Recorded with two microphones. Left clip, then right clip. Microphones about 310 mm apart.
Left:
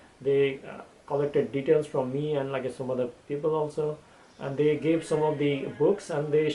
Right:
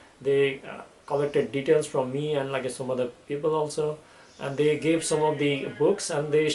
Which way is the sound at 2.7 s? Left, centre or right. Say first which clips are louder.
Right 1 dB; left.